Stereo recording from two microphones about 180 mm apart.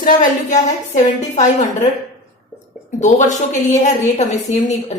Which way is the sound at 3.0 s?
40° left (ahead or behind).